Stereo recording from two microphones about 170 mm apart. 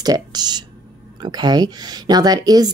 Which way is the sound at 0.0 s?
25° right (ahead or behind).